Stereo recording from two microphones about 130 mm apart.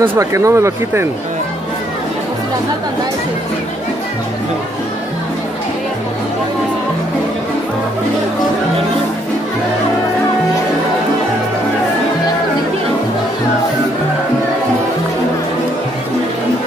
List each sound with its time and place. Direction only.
0.0 s speech: 20° right (ahead or behind)